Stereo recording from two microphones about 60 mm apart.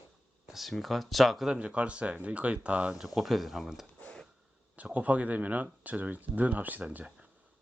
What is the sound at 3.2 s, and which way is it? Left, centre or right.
Speech, centre.